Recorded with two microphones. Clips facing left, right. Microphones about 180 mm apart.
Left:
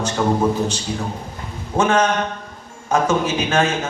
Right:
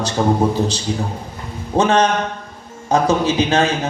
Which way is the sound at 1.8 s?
35° right (ahead or behind).